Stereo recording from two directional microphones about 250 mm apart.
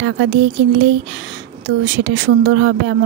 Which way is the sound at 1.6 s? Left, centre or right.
Right.